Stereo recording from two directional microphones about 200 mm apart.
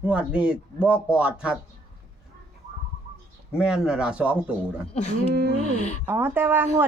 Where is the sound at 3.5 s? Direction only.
5° right (ahead or behind).